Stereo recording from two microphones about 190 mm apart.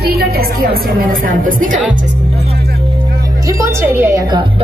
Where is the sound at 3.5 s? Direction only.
15° right (ahead or behind).